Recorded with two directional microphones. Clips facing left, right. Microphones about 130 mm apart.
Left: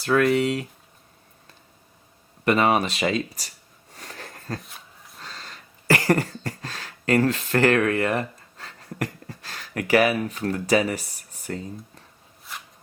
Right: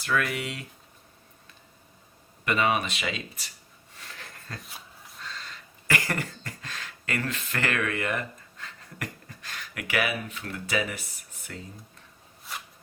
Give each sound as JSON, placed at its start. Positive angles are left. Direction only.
{"t": 0.0, "sound": "speech", "side_deg": 35}
{"t": 2.4, "sound": "speech", "side_deg": 40}
{"t": 3.9, "sound": "a sound", "side_deg": 40}
{"t": 4.6, "sound": "dog", "side_deg": 0}
{"t": 5.2, "sound": "cough", "side_deg": 35}